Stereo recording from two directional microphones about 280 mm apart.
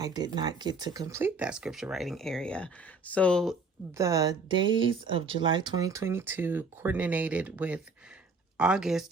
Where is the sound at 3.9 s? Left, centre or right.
Centre.